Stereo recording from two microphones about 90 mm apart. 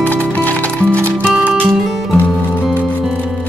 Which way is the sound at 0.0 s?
15° left (ahead or behind).